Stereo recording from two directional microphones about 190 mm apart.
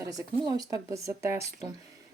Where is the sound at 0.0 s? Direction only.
20° right (ahead or behind).